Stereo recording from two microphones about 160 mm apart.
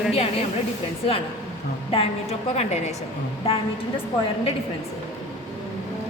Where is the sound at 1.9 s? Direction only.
40° left (ahead or behind).